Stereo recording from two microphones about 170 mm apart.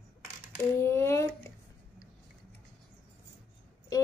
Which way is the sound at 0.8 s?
15° left (ahead or behind).